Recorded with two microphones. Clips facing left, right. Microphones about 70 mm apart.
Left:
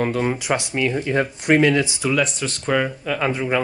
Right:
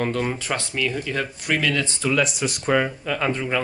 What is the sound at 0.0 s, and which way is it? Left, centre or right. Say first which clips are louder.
Speech: left 3 dB; centre.